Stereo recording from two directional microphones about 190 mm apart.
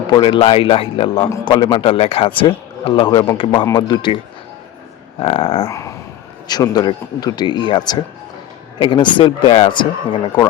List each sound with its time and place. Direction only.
0.1 s a man's voice: 25° left (ahead or behind)
5.2 s a man's voice: 30° left (ahead or behind)
5.6 s a sound: 15° left (ahead or behind)
6.5 s a man's voice: 20° left (ahead or behind)